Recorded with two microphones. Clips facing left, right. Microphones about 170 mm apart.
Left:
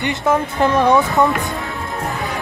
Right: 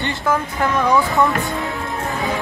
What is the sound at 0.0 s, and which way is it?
Speech, 25° left (ahead or behind).